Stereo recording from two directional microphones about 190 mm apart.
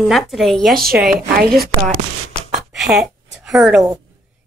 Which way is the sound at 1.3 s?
50° right (ahead or behind).